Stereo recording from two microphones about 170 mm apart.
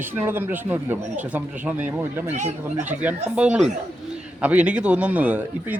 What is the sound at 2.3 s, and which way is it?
Speech, 45° right (ahead or behind).